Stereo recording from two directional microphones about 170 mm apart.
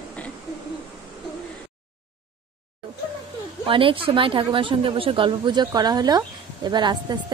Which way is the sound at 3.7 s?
30° right (ahead or behind).